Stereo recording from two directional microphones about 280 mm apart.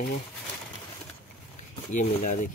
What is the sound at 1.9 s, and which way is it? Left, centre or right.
Speech, left.